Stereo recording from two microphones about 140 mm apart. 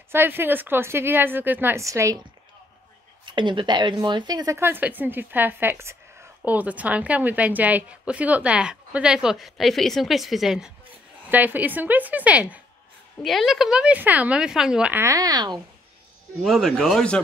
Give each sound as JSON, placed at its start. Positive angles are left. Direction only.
{"t": 0.1, "sound": "a woman's voice", "side_deg": -15}
{"t": 3.3, "sound": "a woman's voice", "side_deg": -35}
{"t": 11.2, "sound": "a woman's voice", "side_deg": -15}
{"t": 13.2, "sound": "a woman's voice", "side_deg": 0}
{"t": 15.0, "sound": "speech", "side_deg": -25}
{"t": 16.4, "sound": "a woman's voice", "side_deg": 5}